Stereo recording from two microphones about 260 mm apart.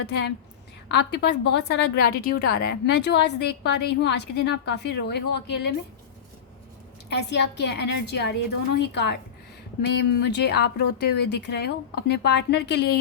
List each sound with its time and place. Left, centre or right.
0.0 s a woman's voice: left
7.1 s a woman's voice: left